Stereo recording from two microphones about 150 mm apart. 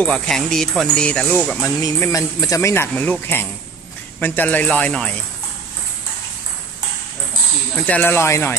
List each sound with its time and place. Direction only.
0.0 s speech: 5° left (ahead or behind)
1.8 s speech: 20° left (ahead or behind)
7.7 s speech: 10° left (ahead or behind)